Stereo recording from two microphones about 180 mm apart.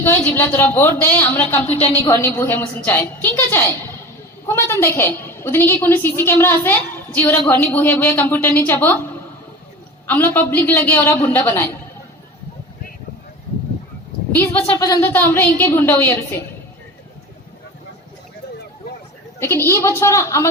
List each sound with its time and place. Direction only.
0.0 s a woman's voice: 10° left (ahead or behind)
1.6 s a woman's voice: 35° left (ahead or behind)
2.0 s a woman's voice: 10° left (ahead or behind)
14.3 s a woman's voice: 15° left (ahead or behind)
19.4 s a woman's voice: 15° left (ahead or behind)